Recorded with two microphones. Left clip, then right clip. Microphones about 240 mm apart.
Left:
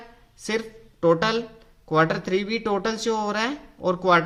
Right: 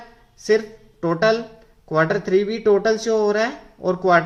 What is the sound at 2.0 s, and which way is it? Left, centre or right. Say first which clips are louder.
Speech: right 4 dB; left.